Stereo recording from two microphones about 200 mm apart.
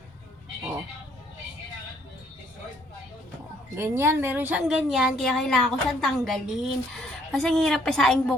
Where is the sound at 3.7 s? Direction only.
10° right (ahead or behind).